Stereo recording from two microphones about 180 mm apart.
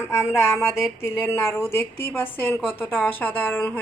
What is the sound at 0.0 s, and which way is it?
A woman's voice, 15° left (ahead or behind).